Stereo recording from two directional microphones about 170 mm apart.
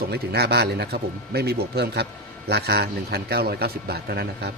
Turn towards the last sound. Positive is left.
turn(degrees=-70)  # may be behind; listen again after turning